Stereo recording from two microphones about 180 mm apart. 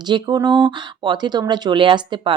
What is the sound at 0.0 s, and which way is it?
Speech, 25° right (ahead or behind).